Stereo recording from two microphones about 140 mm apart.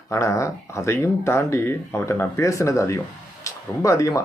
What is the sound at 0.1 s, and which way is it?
Speech, 20° left (ahead or behind).